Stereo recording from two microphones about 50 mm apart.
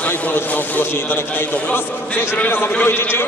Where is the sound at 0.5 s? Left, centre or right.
Left.